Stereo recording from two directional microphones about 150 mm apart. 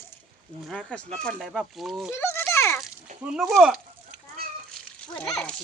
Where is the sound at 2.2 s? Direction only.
15° left (ahead or behind).